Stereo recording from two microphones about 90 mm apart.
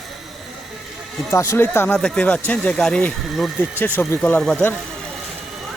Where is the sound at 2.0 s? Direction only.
10° left (ahead or behind).